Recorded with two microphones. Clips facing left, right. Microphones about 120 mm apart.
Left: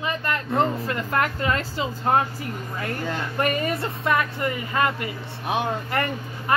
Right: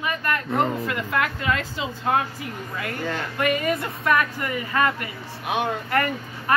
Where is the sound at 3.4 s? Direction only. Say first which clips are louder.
Right 1 dB; 40° left (ahead or behind).